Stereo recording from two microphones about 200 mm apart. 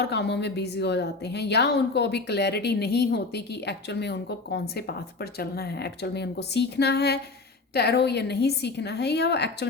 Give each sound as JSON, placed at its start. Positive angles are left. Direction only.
{"t": 0.0, "sound": "a woman's voice", "side_deg": 55}